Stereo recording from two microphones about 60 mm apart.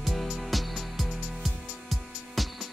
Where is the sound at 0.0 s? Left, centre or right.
Centre.